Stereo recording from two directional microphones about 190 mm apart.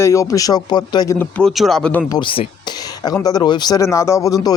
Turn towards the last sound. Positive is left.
turn(degrees=15)  # may be behind; listen again after turning